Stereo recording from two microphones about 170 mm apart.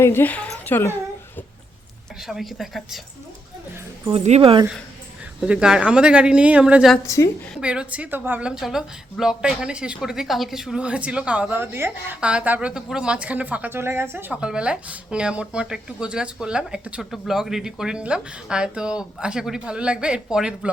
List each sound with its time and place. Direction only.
0.0 s speech: 15° left (ahead or behind)
2.2 s a woman's voice: centre (ahead or behind)
4.1 s speech: 40° right (ahead or behind)
5.4 s speech: 5° right (ahead or behind)
7.0 s a woman's voice: 20° left (ahead or behind)
7.5 s a woman's voice: 5° right (ahead or behind)